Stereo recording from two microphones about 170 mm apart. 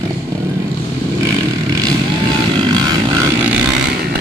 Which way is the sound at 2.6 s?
25° right (ahead or behind).